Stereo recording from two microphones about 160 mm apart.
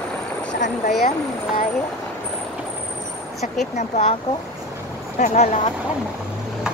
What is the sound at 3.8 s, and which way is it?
Speech, 45° left (ahead or behind).